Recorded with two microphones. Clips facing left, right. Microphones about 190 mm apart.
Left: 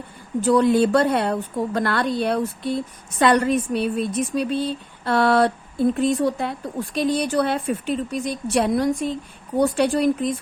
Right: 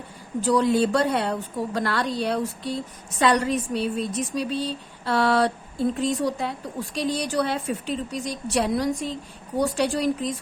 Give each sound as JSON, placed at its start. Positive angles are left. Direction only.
{"t": 0.4, "sound": "a woman's voice", "side_deg": 55}